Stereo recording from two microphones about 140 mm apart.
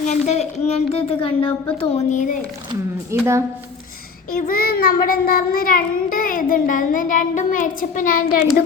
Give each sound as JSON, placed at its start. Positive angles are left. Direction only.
{"t": 0.1, "sound": "speech", "side_deg": 50}
{"t": 3.1, "sound": "speech", "side_deg": -20}
{"t": 4.4, "sound": "child singing", "side_deg": 90}